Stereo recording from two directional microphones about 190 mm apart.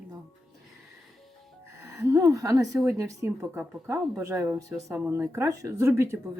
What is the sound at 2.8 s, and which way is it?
Speech, 15° right (ahead or behind).